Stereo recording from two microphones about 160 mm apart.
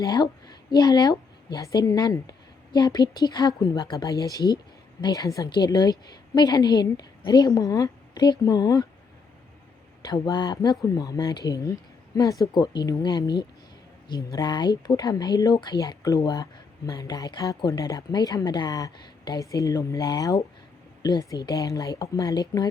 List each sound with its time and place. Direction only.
0.0 s a woman's voice: 25° left (ahead or behind)
10.0 s speech: 25° left (ahead or behind)
14.3 s speech: 25° left (ahead or behind)